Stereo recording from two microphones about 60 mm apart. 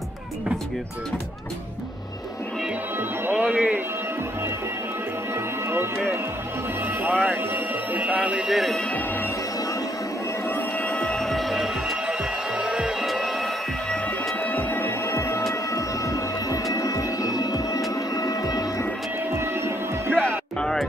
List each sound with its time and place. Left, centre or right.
3.3 s speech: right
5.3 s music: right
7.0 s speech: right
8.5 s speech: centre
10.5 s music: left
11.1 s train: centre
12.1 s music: centre
14.4 s bagpipes: left
15.0 s vehicle: left
15.7 s music: left
18.1 s music: left
19.3 s music: right
20.1 s music: centre